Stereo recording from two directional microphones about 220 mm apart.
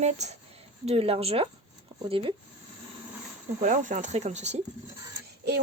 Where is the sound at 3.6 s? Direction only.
35° right (ahead or behind).